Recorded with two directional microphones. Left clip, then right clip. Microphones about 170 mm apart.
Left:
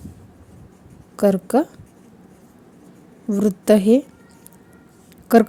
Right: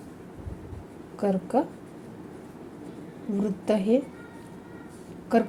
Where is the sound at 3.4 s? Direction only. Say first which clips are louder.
Left 10 dB; 90° left.